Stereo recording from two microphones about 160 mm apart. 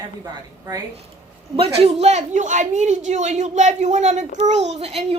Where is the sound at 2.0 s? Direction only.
45° right (ahead or behind).